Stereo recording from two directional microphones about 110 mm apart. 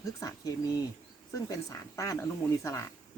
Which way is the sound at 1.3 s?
30° left (ahead or behind).